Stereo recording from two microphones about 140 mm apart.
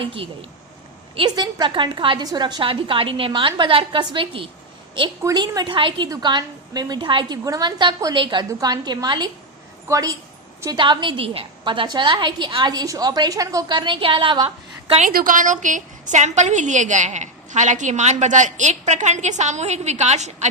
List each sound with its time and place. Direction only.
0.0 s a woman's voice: 40° right (ahead or behind)
10.8 s a woman's voice: 35° right (ahead or behind)
15.0 s a woman's voice: 80° right; by 20.5 s 55° right (ahead or behind)